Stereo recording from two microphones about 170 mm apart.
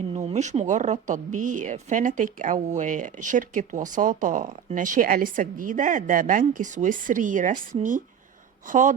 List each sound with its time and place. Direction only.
0.1 s speech: 40° right (ahead or behind)